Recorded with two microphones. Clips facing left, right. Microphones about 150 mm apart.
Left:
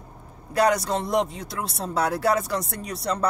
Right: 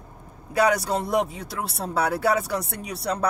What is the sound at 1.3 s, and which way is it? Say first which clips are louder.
Speech: even; 60° right (ahead or behind).